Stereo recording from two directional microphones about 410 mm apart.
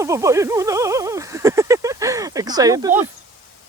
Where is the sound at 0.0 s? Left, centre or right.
Centre.